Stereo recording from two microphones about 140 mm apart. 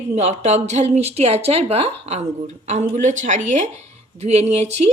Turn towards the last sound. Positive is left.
turn(degrees=-50)  # may be behind; listen again after turning